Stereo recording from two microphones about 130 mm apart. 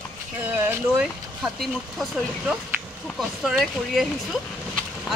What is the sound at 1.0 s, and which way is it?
Speech, 5° right (ahead or behind).